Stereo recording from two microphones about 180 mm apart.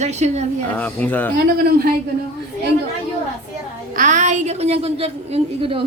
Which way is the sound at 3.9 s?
45° right (ahead or behind).